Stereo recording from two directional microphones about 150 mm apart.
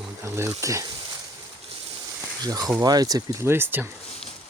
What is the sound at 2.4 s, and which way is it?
Speech, 25° right (ahead or behind).